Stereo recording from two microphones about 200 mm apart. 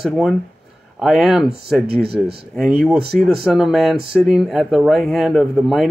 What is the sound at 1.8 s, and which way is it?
Speech, 50° right (ahead or behind).